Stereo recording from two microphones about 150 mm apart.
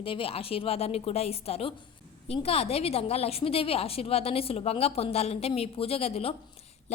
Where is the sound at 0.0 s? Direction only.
35° left (ahead or behind).